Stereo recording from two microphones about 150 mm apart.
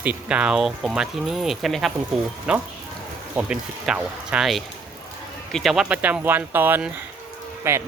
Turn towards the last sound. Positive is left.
turn(degrees=-15)  # may be behind; listen again after turning